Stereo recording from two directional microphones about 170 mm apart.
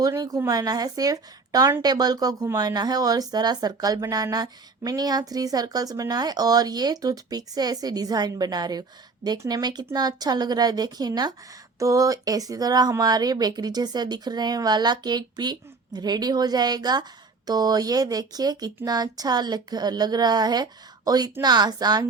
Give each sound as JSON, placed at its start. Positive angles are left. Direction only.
{"t": 0.0, "sound": "speech", "side_deg": -20}